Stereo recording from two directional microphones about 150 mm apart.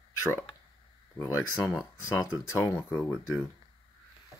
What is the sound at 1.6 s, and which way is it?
Speech, centre (ahead or behind).